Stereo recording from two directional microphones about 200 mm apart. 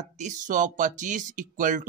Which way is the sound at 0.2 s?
40° right (ahead or behind).